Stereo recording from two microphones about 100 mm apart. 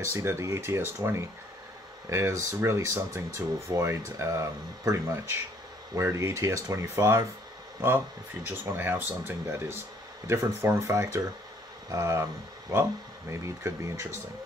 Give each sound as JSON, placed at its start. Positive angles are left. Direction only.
{"t": 0.0, "sound": "speech", "side_deg": -25}
{"t": 8.5, "sound": "speech", "side_deg": -20}
{"t": 13.3, "sound": "speech", "side_deg": -30}